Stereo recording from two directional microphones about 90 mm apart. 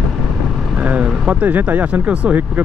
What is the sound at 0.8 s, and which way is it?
Speech, 15° right (ahead or behind).